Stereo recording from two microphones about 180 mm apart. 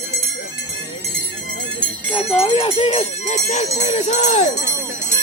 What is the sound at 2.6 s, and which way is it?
Jingle bell, 30° left (ahead or behind).